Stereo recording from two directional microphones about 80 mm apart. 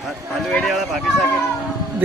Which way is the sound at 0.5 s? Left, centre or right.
Centre.